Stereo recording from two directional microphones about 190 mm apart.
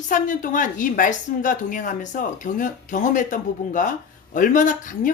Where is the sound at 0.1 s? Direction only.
45° left (ahead or behind).